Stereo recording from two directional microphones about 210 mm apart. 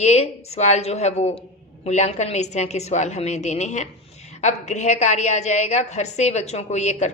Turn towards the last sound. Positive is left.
turn(degrees=35)  # may be behind; listen again after turning